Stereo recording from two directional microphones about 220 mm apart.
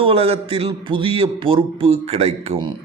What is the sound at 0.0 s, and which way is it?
A man's voice, 25° right (ahead or behind).